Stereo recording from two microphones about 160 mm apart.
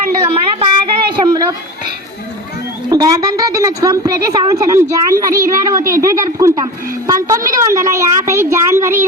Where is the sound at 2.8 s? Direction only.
25° right (ahead or behind).